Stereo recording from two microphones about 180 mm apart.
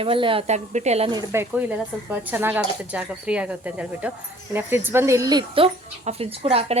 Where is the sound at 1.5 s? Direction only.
10° right (ahead or behind).